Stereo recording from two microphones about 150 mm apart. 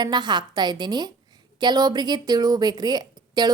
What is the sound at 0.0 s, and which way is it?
A woman's voice, 30° right (ahead or behind).